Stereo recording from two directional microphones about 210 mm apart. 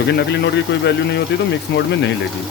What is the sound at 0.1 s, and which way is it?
Speech, 55° left (ahead or behind).